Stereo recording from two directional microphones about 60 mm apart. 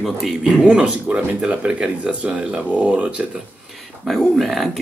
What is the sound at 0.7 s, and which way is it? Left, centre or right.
Speech, centre.